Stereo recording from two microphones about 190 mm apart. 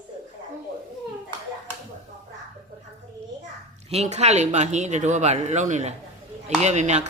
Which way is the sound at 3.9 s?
35° right (ahead or behind).